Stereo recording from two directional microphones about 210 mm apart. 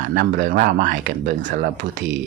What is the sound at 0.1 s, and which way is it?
Speech, 40° right (ahead or behind).